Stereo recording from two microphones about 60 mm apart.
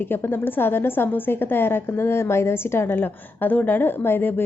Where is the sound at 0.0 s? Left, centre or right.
Left.